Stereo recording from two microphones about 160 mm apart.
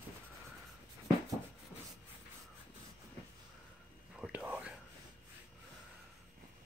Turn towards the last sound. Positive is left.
turn(degrees=-10)  # may be behind; listen again after turning